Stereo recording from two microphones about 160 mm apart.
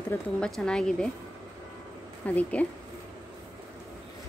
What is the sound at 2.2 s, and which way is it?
Speech, 10° left (ahead or behind).